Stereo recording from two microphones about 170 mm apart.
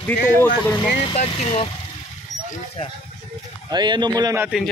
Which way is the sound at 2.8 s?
40° left (ahead or behind).